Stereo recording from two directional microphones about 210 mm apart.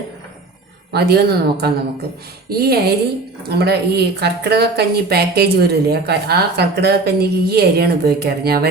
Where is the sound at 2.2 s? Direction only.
50° right (ahead or behind).